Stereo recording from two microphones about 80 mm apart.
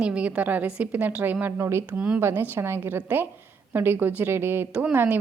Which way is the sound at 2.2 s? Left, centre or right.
Right.